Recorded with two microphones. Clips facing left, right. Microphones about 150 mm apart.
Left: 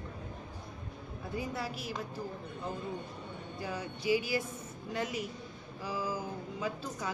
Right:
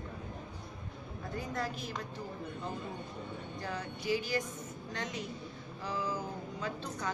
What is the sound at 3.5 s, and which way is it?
Speech, 10° left (ahead or behind).